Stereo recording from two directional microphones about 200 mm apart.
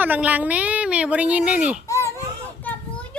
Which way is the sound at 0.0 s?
10° right (ahead or behind).